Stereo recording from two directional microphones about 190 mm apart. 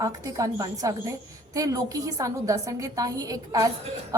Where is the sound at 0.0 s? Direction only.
20° right (ahead or behind).